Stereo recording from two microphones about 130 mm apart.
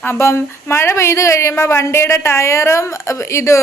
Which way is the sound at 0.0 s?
20° left (ahead or behind).